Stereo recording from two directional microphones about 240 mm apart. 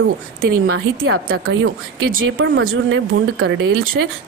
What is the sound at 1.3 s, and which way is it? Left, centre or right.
Speech, right.